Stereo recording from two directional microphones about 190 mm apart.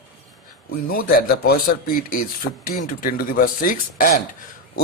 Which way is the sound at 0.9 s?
50° left (ahead or behind).